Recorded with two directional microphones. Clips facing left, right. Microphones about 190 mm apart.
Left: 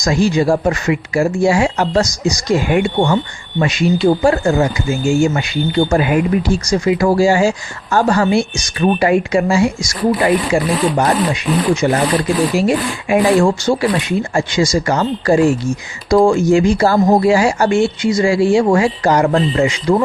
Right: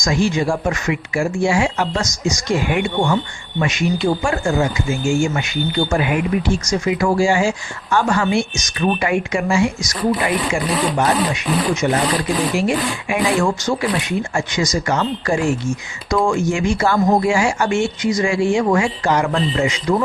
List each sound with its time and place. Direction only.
0.0 s speech: 35° left (ahead or behind)